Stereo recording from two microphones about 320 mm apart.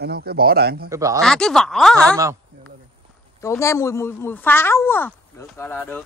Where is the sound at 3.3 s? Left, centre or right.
Centre.